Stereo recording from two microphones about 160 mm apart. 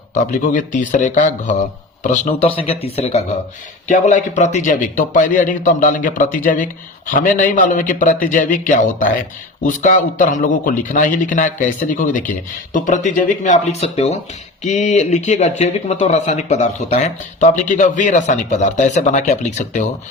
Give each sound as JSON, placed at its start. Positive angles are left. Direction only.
{"t": 0.1, "sound": "speech", "side_deg": 50}
{"t": 2.4, "sound": "a man's voice", "side_deg": 35}